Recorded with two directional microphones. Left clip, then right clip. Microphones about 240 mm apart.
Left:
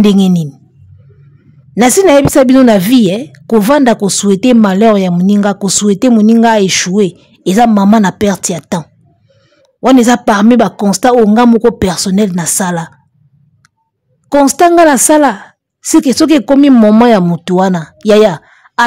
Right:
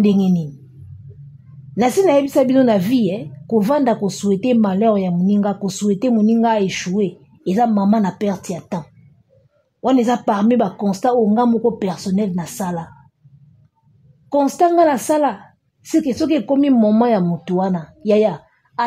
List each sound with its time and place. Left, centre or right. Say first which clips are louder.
0.0 s a woman's voice: left 8 dB; left
1.8 s a woman's voice: left 8 dB; left
14.3 s a woman's voice: left 8 dB; left